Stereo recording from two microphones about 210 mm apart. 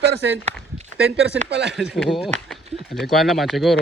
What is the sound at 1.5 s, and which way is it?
Speech, 55° right (ahead or behind).